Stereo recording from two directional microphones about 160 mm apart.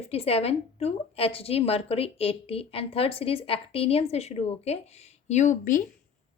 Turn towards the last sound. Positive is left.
turn(degrees=55)  # may be behind; listen again after turning